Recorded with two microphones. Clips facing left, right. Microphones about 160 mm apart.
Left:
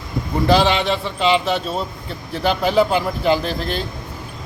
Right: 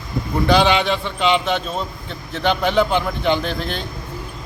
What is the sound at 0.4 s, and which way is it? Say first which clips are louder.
A man's voice: even; centre (ahead or behind).